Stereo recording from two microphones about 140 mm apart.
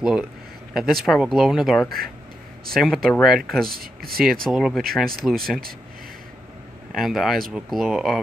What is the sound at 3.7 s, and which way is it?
Speech, 90° right.